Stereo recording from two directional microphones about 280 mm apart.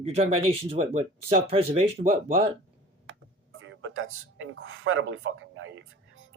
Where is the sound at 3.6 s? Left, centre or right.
Right.